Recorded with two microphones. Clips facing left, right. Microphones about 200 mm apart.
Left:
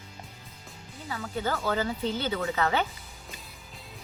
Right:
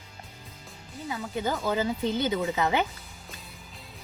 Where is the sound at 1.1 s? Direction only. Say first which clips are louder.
Right 1 dB; 15° right (ahead or behind).